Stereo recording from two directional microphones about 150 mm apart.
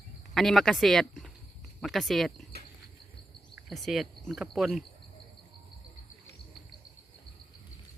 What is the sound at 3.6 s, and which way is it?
Cricket, centre (ahead or behind).